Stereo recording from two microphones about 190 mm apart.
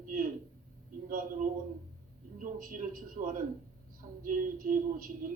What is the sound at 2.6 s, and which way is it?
A woman's voice, 45° right (ahead or behind).